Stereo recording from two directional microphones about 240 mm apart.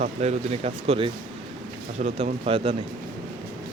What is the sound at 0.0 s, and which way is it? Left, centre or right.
Speech, right.